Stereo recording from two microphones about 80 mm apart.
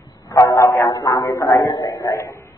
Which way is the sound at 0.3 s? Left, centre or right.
Left.